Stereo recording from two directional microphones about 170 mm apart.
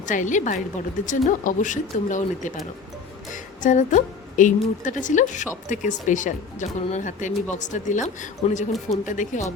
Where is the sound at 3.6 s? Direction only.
45° left (ahead or behind).